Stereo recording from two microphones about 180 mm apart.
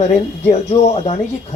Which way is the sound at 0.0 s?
35° left (ahead or behind).